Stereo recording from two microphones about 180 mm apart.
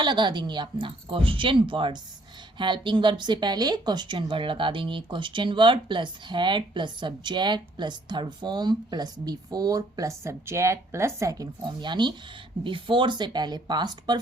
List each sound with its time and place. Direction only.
0.0 s a woman's voice: 25° right (ahead or behind)